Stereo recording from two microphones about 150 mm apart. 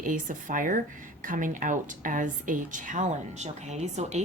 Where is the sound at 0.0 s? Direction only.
60° right (ahead or behind).